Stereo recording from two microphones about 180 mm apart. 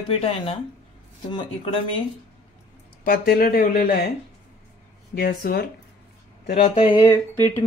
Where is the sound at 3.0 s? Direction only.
55° left (ahead or behind).